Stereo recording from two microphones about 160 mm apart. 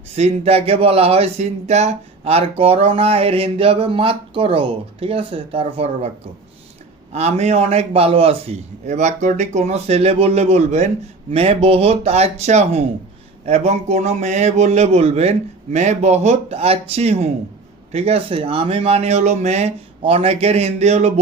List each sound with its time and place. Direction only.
0.2 s speech: 40° right (ahead or behind)
7.1 s a man's voice: 40° right (ahead or behind)